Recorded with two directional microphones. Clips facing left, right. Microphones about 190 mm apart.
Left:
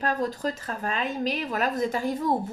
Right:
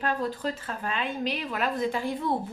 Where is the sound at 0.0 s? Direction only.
40° left (ahead or behind).